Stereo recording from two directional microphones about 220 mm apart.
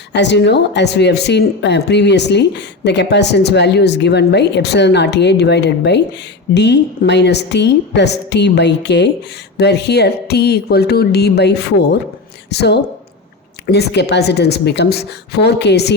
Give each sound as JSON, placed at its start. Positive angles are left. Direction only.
{"t": 0.1, "sound": "speech", "side_deg": 50}